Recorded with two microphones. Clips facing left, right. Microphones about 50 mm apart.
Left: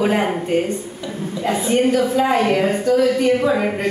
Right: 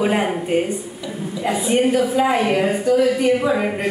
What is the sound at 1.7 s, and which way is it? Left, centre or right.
A woman's voice, right.